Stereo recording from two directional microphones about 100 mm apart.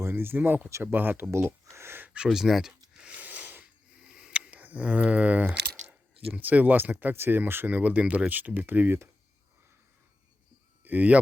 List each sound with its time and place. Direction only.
0.0 s speech: 20° right (ahead or behind); by 2.7 s 5° right (ahead or behind)
3.0 s a sound: 15° right (ahead or behind)
6.3 s speech: 15° right (ahead or behind)
10.8 s speech: 15° right (ahead or behind)